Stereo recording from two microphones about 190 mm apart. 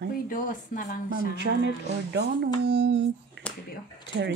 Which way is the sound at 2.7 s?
70° right (ahead or behind).